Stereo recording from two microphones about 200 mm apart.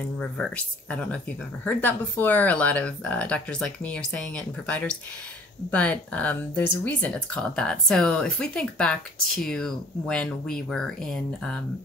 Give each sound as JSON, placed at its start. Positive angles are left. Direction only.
{"t": 0.2, "sound": "speech", "side_deg": 5}